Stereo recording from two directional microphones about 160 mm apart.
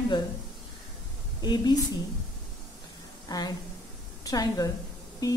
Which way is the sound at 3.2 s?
25° left (ahead or behind).